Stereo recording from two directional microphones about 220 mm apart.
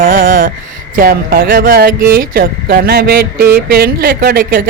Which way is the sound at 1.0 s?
40° right (ahead or behind).